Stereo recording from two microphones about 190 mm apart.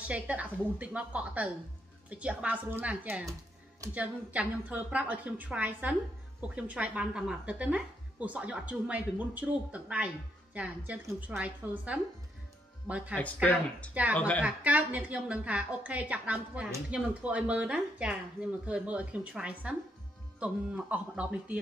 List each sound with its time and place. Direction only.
0.0 s a woman's voice: 5° right (ahead or behind)
13.1 s speech: 5° left (ahead or behind)
14.4 s a woman's voice: 5° right (ahead or behind)